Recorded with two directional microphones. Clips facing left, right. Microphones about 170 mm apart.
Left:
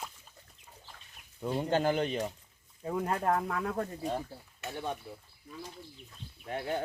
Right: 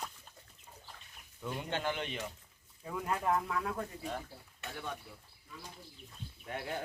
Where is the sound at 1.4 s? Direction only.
35° left (ahead or behind).